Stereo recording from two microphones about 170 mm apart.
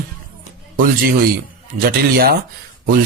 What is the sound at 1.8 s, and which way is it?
Speech, 60° right (ahead or behind).